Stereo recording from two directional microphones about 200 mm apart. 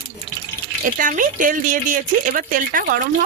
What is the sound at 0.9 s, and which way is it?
Speech, 40° right (ahead or behind).